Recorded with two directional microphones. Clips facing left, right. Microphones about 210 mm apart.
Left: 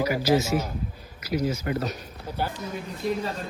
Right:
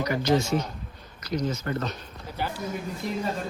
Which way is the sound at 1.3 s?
65° left (ahead or behind).